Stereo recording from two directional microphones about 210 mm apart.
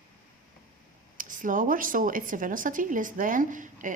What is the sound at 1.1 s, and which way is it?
Speech, 40° right (ahead or behind).